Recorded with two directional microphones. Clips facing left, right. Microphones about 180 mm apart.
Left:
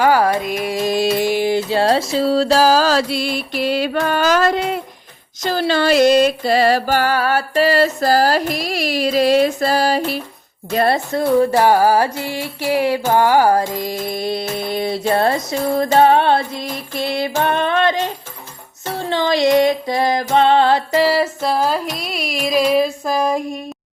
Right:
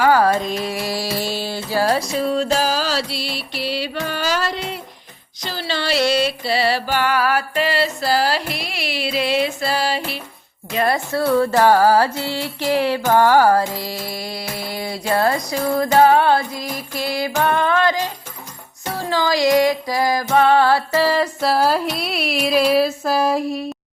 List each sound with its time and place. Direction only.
0.0 s mantra: 15° left (ahead or behind); by 4.8 s 50° left (ahead or behind)
5.4 s music: 50° left (ahead or behind)
10.7 s a woman's voice: 40° left (ahead or behind)
10.9 s music: 20° left (ahead or behind)
21.4 s music: 5° right (ahead or behind)